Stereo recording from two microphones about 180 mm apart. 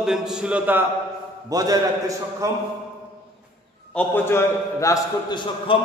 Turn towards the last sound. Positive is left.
turn(degrees=25)  # may be behind; listen again after turning